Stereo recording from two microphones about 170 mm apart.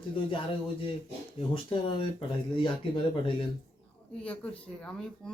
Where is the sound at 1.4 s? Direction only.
30° left (ahead or behind).